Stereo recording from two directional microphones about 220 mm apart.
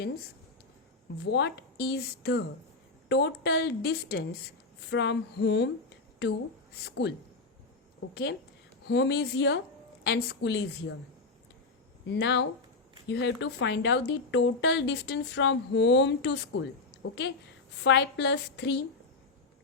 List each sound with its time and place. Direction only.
1.2 s speech: 50° left (ahead or behind)
6.8 s speech: 50° left (ahead or behind)
8.1 s speech: 50° left (ahead or behind)
12.0 s speech: 55° left (ahead or behind)